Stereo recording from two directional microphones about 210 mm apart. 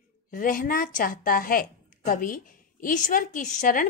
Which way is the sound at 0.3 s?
40° left (ahead or behind).